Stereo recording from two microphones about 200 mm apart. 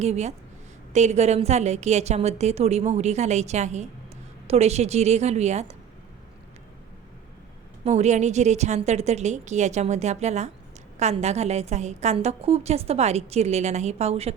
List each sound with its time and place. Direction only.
0.0 s a woman's voice: 35° right (ahead or behind)
7.9 s a woman's voice: 35° right (ahead or behind)